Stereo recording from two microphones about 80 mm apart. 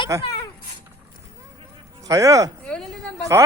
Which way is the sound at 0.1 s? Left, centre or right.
Right.